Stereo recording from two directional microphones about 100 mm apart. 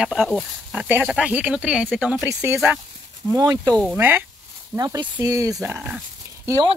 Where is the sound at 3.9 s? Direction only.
20° right (ahead or behind).